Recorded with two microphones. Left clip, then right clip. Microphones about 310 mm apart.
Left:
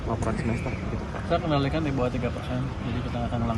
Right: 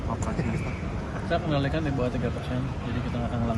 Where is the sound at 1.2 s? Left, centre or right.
Centre.